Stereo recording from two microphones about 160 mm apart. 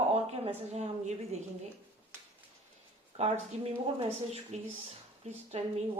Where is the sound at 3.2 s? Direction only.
35° right (ahead or behind).